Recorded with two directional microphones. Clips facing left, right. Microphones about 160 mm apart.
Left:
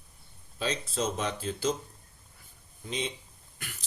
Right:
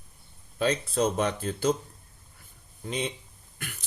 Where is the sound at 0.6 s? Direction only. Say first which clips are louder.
Right 6 dB; 55° right (ahead or behind).